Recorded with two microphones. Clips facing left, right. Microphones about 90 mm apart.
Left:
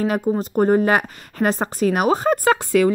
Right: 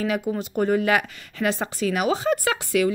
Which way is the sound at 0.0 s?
40° left (ahead or behind).